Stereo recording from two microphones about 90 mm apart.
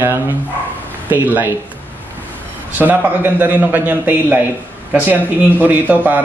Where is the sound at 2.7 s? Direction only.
20° right (ahead or behind).